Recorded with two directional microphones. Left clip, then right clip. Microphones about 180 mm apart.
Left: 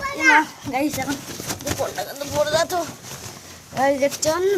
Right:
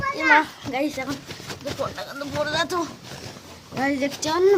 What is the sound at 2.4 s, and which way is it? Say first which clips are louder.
Speech: left 5 dB; 10° left (ahead or behind).